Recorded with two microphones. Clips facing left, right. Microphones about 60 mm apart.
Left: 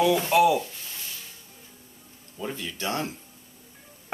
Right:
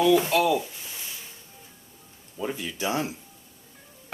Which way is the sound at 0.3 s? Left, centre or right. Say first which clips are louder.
Left 3 dB; centre.